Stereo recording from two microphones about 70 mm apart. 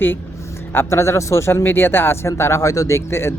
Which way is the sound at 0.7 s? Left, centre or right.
Left.